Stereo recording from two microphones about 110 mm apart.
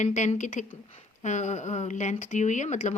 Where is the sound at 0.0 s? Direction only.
90° left.